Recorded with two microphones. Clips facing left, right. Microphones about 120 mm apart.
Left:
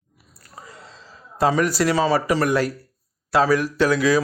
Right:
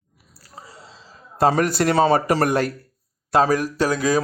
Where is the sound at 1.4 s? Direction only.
50° right (ahead or behind).